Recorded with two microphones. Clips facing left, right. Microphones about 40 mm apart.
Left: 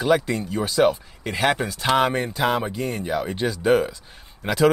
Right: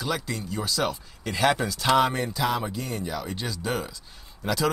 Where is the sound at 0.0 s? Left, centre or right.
Left.